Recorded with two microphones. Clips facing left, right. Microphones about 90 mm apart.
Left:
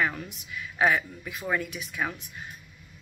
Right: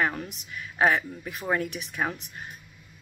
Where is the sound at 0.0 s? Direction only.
40° right (ahead or behind).